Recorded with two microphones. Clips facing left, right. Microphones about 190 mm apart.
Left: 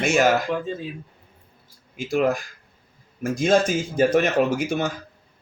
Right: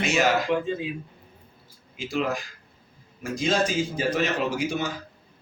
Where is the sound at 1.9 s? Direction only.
50° left (ahead or behind).